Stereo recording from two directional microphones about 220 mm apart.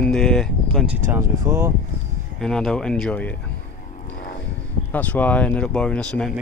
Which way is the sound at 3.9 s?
40° left (ahead or behind).